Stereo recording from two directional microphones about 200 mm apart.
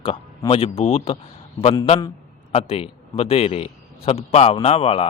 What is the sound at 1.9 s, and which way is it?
A man's voice, 20° left (ahead or behind).